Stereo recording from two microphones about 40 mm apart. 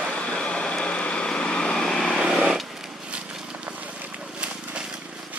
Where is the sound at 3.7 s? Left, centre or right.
Right.